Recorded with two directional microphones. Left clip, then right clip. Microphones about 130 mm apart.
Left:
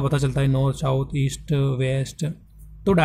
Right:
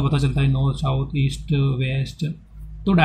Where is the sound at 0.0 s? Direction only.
55° left (ahead or behind).